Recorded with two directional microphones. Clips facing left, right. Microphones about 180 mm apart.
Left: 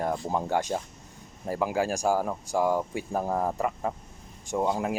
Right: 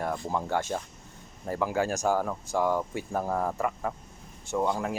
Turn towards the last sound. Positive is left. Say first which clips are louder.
# left 1 dB
turn(degrees=20)  # may be behind; listen again after turning